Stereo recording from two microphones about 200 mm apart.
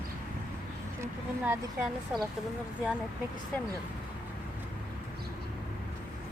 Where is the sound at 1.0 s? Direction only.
10° right (ahead or behind).